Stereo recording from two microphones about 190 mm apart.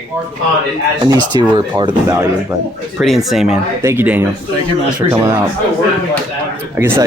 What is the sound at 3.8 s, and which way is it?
Speech, 15° right (ahead or behind).